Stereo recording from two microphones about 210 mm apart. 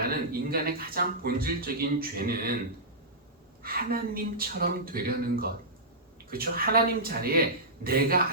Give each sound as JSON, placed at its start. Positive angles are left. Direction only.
{"t": 0.0, "sound": "speech", "side_deg": -45}
{"t": 3.6, "sound": "speech", "side_deg": -45}